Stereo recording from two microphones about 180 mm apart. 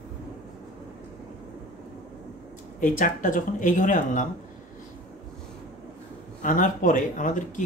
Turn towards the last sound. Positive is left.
turn(degrees=45)  # may be behind; listen again after turning